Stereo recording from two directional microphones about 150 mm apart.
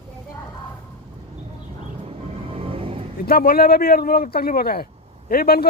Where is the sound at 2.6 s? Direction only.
40° right (ahead or behind).